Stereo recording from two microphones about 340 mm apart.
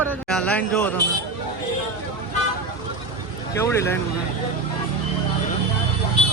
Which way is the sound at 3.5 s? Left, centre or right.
Centre.